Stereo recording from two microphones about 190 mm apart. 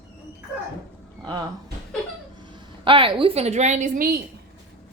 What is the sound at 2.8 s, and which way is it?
A woman's voice, 25° right (ahead or behind).